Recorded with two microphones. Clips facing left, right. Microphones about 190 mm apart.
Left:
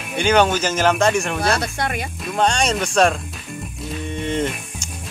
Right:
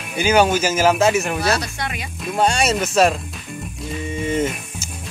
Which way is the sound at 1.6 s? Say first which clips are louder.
Left 4 dB; 50° left (ahead or behind).